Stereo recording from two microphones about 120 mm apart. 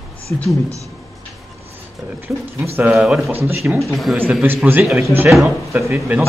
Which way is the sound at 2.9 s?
5° right (ahead or behind).